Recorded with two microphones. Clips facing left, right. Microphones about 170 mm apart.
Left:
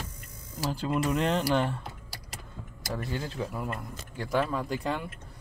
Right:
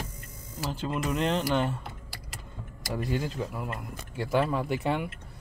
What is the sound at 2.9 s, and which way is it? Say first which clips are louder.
Speech: right 3 dB; 10° right (ahead or behind).